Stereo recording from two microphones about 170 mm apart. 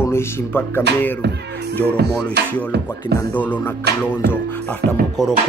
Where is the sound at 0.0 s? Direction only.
15° left (ahead or behind).